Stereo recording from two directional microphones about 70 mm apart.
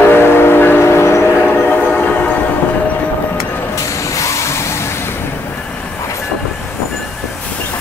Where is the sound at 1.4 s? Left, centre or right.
Left.